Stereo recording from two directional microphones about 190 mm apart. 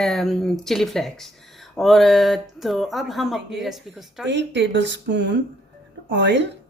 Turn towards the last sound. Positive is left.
turn(degrees=-70)  # may be behind; listen again after turning